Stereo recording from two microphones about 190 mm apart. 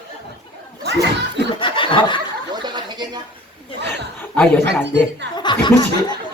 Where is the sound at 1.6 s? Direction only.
25° left (ahead or behind).